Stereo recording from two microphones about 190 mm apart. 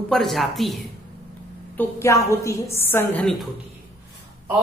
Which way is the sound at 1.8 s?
15° left (ahead or behind).